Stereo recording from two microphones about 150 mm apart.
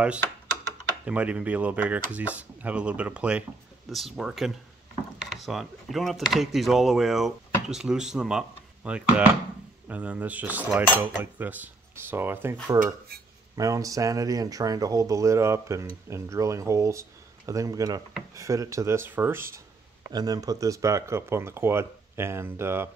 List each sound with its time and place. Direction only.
1.0 s speech: 10° right (ahead or behind)
12.7 s dishes: 65° right (ahead or behind)
13.6 s speech: 20° right (ahead or behind)